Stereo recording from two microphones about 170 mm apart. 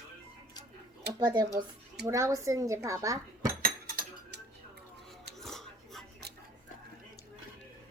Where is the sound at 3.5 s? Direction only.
55° right (ahead or behind).